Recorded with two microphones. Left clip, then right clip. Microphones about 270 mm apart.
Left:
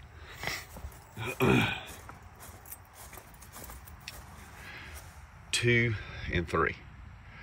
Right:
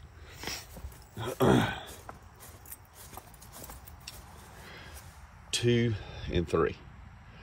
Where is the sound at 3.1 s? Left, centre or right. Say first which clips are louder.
Right 3 dB; centre.